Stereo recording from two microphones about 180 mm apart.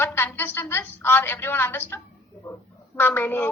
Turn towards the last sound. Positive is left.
turn(degrees=10)  # may be behind; listen again after turning